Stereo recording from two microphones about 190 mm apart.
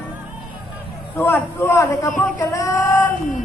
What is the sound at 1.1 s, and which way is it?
A man's voice, 10° left (ahead or behind).